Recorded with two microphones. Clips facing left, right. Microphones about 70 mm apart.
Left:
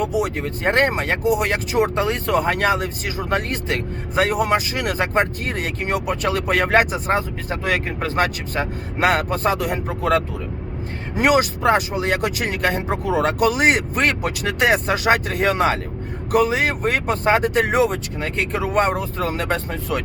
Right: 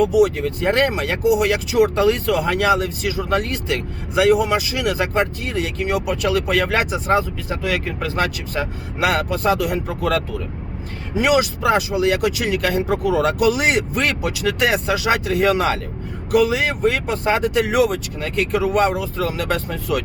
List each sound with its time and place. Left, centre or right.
0.0 s speech: left
11.1 s speech: left